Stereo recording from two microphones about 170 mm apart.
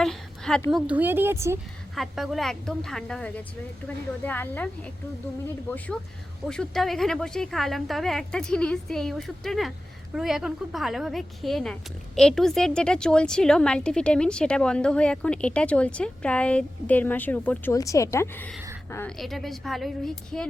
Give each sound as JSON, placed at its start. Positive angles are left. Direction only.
{"t": 0.0, "sound": "a woman's voice", "side_deg": 5}
{"t": 2.0, "sound": "a woman's voice", "side_deg": 0}
{"t": 19.2, "sound": "a woman's voice", "side_deg": 0}